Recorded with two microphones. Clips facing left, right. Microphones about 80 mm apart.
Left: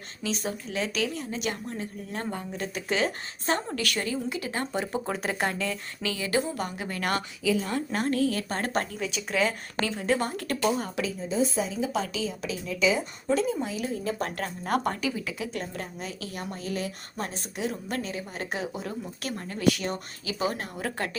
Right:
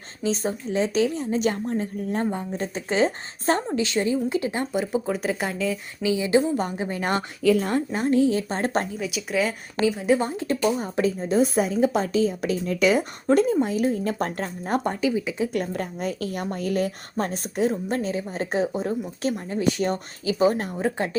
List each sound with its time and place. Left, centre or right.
0.2 s a woman's voice: right
3.8 s a woman's voice: right
4.6 s speech: centre
6.0 s a woman's voice: centre
7.4 s speech: right
7.9 s a woman's voice: centre
9.0 s speech: centre
11.2 s a woman's voice: right
14.3 s a woman's voice: right
15.5 s a woman's voice: right
17.7 s a woman's voice: right
19.8 s a woman's voice: right